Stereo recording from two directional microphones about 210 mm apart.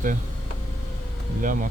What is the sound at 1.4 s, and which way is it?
Speech, 40° right (ahead or behind).